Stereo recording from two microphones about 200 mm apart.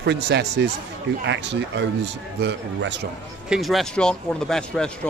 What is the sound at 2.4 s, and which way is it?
Speech, 60° right (ahead or behind).